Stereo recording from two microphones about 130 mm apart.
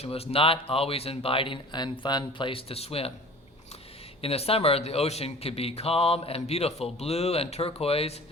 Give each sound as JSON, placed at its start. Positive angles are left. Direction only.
{"t": 0.0, "sound": "speech", "side_deg": 50}
{"t": 4.2, "sound": "speech", "side_deg": 50}